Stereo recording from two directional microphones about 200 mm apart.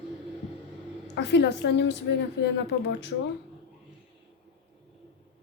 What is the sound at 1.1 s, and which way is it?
Speech, 60° left (ahead or behind).